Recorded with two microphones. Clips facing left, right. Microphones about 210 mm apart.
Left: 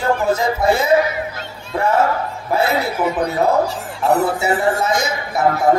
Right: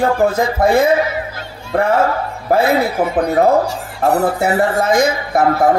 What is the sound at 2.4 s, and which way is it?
A man's voice, 55° right (ahead or behind).